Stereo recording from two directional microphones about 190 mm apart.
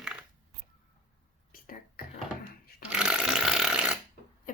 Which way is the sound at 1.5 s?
50° left (ahead or behind).